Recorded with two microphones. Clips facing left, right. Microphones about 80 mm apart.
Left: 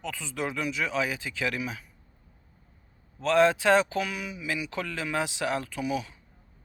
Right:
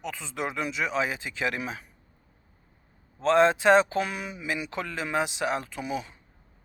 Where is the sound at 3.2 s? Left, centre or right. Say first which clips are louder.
Right 1 dB; right.